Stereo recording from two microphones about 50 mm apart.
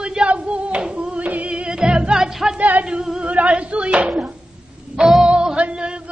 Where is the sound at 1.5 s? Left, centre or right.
Centre.